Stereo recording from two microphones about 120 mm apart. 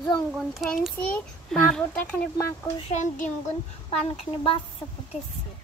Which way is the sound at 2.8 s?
90° left.